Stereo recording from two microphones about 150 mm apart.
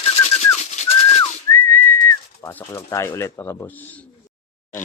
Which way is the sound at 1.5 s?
15° left (ahead or behind).